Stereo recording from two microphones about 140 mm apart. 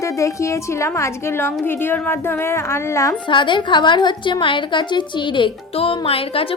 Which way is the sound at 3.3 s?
35° left (ahead or behind).